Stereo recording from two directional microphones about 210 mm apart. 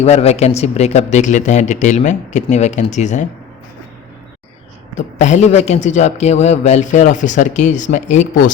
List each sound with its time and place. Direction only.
0.0 s a man's voice: 30° left (ahead or behind)
4.9 s a man's voice: 35° left (ahead or behind)